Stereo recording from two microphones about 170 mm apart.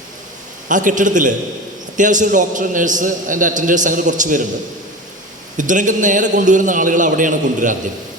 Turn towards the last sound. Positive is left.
turn(degrees=-50)  # may be behind; listen again after turning